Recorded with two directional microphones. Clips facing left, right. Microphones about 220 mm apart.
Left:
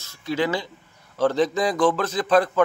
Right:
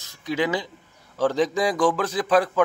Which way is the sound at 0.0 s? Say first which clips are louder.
Left 1 dB; 15° right (ahead or behind).